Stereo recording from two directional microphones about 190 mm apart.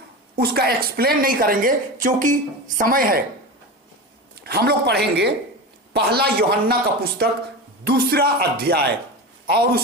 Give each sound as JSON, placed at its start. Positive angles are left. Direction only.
{"t": 0.3, "sound": "speech", "side_deg": -55}
{"t": 4.4, "sound": "speech", "side_deg": -55}